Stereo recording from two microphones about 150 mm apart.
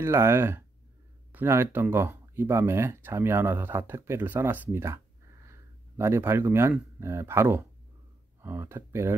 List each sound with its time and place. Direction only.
0.0 s speech: 15° right (ahead or behind)